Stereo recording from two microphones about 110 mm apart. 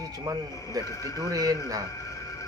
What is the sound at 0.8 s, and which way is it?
Speech, 30° left (ahead or behind).